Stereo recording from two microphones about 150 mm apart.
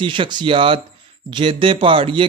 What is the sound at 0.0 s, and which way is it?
Speech, 35° right (ahead or behind).